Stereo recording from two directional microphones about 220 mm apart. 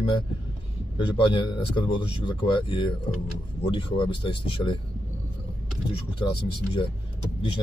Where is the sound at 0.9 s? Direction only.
20° left (ahead or behind).